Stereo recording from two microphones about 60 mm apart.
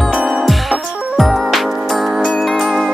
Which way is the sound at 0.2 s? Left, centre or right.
Centre.